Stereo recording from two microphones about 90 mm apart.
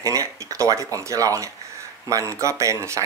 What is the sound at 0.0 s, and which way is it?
A man's voice, 35° right (ahead or behind).